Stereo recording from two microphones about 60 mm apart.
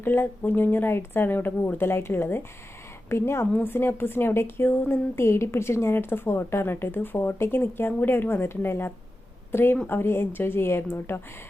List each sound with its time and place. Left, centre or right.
0.0 s a woman's voice: left